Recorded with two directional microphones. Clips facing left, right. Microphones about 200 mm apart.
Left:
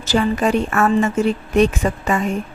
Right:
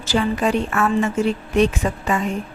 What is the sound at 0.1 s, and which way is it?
A woman's voice, 45° left (ahead or behind).